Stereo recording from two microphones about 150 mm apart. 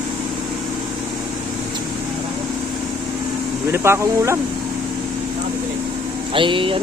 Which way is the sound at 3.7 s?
15° right (ahead or behind).